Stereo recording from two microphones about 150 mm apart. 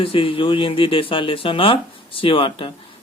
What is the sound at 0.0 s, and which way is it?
Speech, 35° left (ahead or behind).